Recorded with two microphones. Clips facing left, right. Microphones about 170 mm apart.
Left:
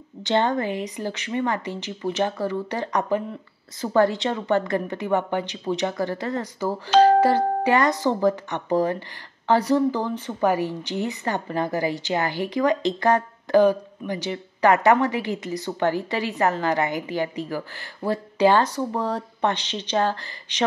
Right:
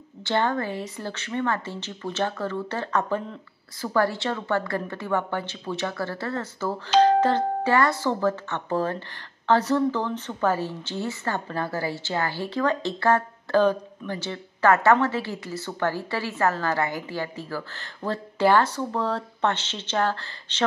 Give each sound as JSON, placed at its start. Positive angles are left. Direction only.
{"t": 0.2, "sound": "a woman's voice", "side_deg": 20}